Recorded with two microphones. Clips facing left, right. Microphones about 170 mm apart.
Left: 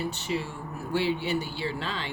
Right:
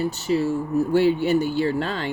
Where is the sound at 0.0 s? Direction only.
40° right (ahead or behind).